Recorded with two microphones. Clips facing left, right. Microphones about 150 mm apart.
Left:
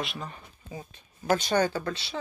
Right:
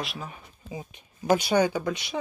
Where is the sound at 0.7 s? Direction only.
15° right (ahead or behind).